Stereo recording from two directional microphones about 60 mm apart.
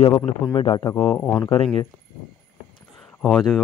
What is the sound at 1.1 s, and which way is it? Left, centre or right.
Speech, left.